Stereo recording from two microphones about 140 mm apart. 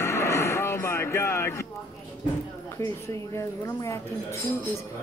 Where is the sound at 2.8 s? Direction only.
20° left (ahead or behind).